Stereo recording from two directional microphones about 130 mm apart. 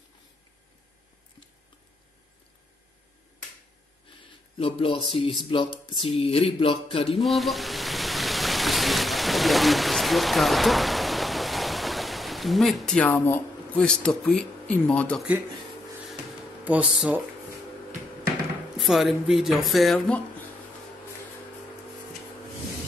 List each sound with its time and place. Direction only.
4.6 s speech: 45° left (ahead or behind)
7.2 s a sound: centre (ahead or behind)
13.0 s speech: 15° left (ahead or behind)
16.9 s speech: 5° right (ahead or behind)
18.8 s speech: centre (ahead or behind)